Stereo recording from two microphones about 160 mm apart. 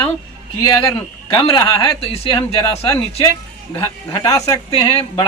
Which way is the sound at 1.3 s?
30° left (ahead or behind).